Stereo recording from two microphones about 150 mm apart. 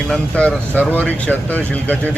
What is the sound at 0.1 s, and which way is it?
Speech, 5° left (ahead or behind).